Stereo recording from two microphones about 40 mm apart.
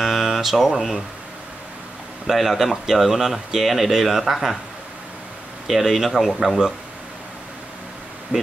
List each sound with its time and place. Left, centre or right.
0.0 s guitar: centre
2.2 s speech: centre
5.7 s speech: centre
8.3 s speech: right